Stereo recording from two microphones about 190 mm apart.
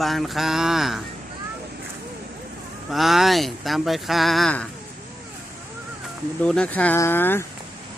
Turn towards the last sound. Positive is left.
turn(degrees=10)  # may be behind; listen again after turning